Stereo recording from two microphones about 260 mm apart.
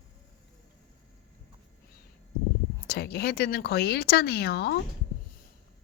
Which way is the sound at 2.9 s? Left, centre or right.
Left.